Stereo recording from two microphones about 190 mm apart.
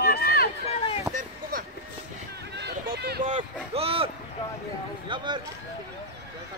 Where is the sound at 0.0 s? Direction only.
55° left (ahead or behind).